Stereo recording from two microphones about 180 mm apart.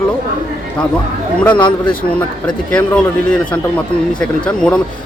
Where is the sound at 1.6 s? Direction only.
25° left (ahead or behind).